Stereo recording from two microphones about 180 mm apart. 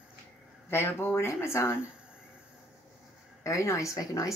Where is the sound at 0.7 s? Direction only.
15° left (ahead or behind).